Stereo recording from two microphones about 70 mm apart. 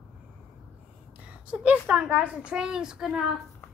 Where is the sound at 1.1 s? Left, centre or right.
Centre.